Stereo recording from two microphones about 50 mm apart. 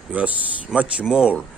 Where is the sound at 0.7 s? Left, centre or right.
Centre.